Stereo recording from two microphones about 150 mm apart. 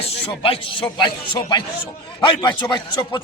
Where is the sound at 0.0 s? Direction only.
40° left (ahead or behind).